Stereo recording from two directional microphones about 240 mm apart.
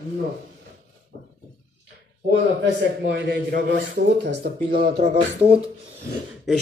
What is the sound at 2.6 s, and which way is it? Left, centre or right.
A man's voice, right.